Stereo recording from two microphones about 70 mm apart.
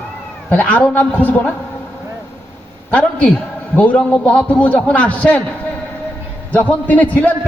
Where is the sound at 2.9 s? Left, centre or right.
Left.